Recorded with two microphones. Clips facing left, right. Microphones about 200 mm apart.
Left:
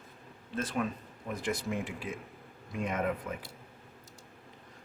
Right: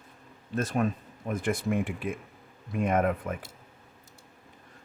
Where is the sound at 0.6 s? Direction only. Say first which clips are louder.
Right 5 dB; 45° right (ahead or behind).